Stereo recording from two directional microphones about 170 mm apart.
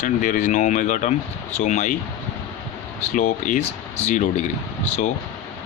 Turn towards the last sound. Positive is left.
turn(degrees=40)  # may be behind; listen again after turning